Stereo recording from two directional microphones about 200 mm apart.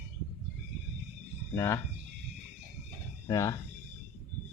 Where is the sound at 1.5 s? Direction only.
15° left (ahead or behind).